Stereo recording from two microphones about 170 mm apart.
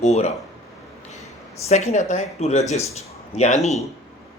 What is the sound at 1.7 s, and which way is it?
A man's voice, 40° left (ahead or behind).